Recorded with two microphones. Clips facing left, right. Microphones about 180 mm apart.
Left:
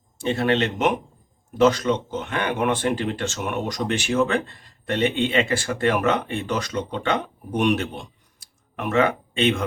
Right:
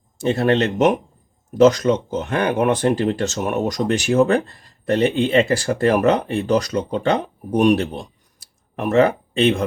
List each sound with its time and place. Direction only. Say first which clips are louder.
0.2 s speech: right 4 dB; 40° right (ahead or behind)